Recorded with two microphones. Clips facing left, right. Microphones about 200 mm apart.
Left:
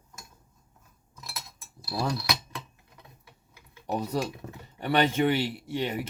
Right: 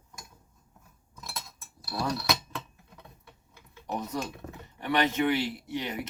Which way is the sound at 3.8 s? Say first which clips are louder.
Left 4 dB; 35° left (ahead or behind).